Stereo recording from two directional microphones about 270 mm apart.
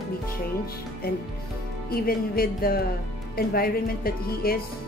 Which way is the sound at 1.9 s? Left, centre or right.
Left.